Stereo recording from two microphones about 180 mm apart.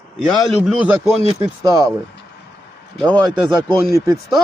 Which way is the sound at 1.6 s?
20° right (ahead or behind).